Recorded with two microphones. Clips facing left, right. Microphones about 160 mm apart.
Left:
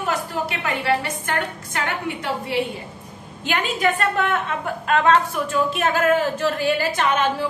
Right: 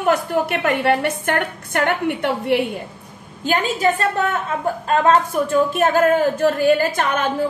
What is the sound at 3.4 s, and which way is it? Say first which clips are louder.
A woman's voice: right 3 dB; 35° right (ahead or behind).